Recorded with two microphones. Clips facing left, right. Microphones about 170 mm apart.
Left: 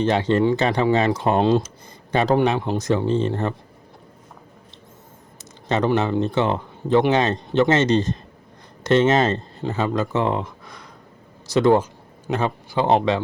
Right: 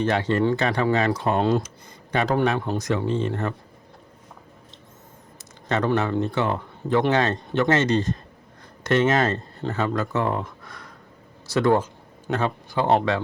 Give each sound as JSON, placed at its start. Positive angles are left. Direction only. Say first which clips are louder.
{"t": 0.0, "sound": "speech", "louder": "left 3 dB", "side_deg": 25}
{"t": 5.6, "sound": "speech", "louder": "left 3 dB", "side_deg": 25}